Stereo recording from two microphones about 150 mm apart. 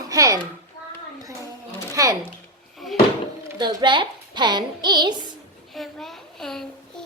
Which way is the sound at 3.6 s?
30° right (ahead or behind).